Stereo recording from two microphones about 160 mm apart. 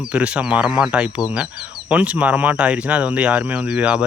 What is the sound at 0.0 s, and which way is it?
Speech, 10° right (ahead or behind).